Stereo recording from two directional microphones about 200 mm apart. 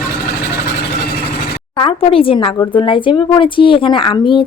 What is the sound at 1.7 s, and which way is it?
Speech, 25° left (ahead or behind).